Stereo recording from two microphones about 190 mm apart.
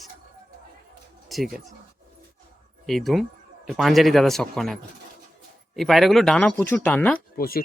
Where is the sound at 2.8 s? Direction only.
Centre (ahead or behind).